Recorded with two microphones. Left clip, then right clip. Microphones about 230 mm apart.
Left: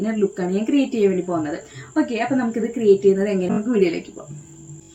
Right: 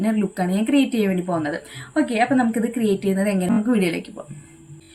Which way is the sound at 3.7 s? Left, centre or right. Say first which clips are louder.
Left 4 dB; right.